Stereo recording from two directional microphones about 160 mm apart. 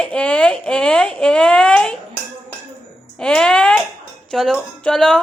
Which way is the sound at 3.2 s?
5° left (ahead or behind).